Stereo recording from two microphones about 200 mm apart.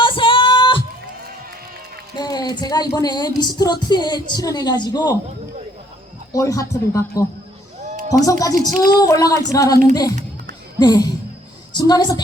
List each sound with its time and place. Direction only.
0.0 s music: 25° left (ahead or behind)
2.1 s music: 20° left (ahead or behind)
6.3 s child singing: 15° left (ahead or behind)
7.8 s a sound: 35° right (ahead or behind)
8.2 s child singing: 15° left (ahead or behind)
9.9 s music: 20° left (ahead or behind)